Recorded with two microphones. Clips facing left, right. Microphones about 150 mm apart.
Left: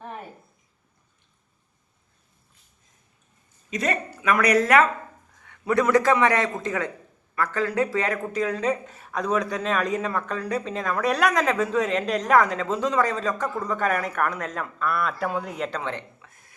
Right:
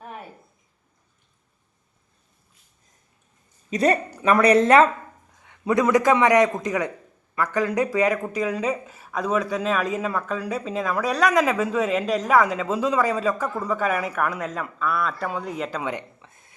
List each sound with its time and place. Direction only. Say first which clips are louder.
3.7 s a woman's voice: right 6 dB; 35° right (ahead or behind)